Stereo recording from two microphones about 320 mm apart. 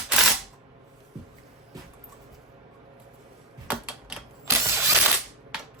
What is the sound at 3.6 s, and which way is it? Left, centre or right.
Camera, centre.